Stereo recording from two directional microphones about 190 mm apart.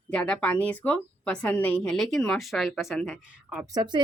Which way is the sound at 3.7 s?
25° right (ahead or behind).